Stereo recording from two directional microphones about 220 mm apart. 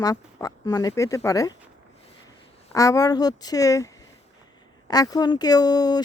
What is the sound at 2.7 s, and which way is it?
Speech, 15° left (ahead or behind).